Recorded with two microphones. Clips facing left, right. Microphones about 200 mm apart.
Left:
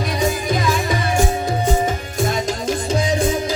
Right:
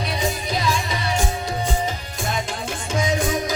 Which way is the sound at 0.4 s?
50° left (ahead or behind).